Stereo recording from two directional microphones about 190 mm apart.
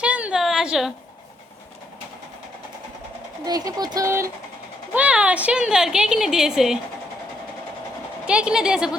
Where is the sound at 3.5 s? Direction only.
20° right (ahead or behind).